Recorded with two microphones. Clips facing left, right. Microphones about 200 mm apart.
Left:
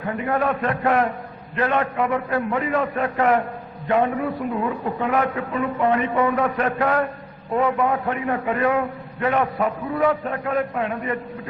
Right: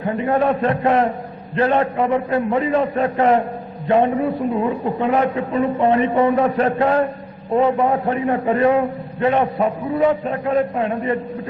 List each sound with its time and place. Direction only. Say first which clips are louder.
0.0 s a man's voice: right 4 dB; 25° right (ahead or behind)